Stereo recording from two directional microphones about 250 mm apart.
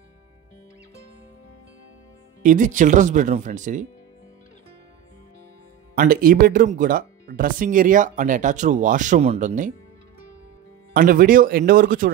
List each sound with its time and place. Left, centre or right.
2.4 s speech: right
5.9 s speech: right
10.9 s speech: right